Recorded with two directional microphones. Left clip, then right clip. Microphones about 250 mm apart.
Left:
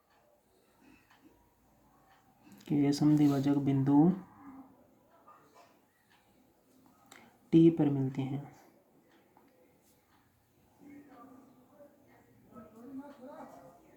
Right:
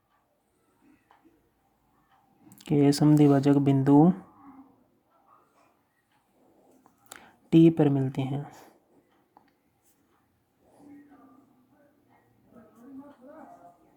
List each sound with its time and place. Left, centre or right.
2.6 s speech: right
7.1 s speech: right